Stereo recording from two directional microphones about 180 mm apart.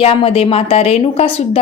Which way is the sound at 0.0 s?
30° left (ahead or behind).